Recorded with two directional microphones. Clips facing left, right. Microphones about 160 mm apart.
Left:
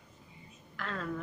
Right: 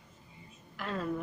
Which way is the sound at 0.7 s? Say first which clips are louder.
Right 3 dB; 15° right (ahead or behind).